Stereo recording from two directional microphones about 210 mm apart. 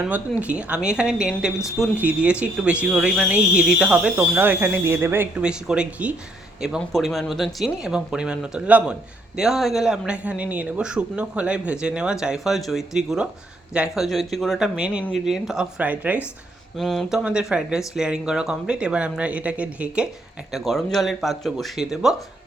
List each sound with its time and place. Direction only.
0.0 s speech: 5° right (ahead or behind)